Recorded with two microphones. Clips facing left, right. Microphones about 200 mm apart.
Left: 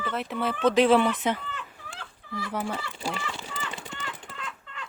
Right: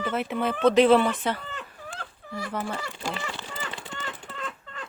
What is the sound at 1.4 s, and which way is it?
Fowl, 45° right (ahead or behind).